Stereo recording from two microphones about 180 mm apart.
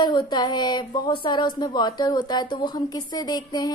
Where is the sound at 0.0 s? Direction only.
25° left (ahead or behind).